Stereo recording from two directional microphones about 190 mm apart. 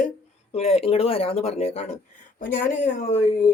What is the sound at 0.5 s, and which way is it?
Speech, 30° left (ahead or behind).